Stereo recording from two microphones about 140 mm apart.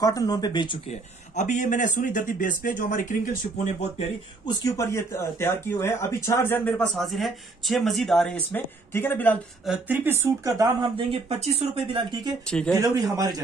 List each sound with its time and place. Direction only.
0.0 s speech: 25° left (ahead or behind)
0.8 s speech: 60° left (ahead or behind)
4.7 s speech: 20° left (ahead or behind)
7.0 s speech: centre (ahead or behind)
9.7 s speech: 15° right (ahead or behind)
10.8 s speech: 40° right (ahead or behind)
12.0 s speech: 35° right (ahead or behind)
12.4 s speech: 5° left (ahead or behind)
12.8 s a man's voice: 25° right (ahead or behind)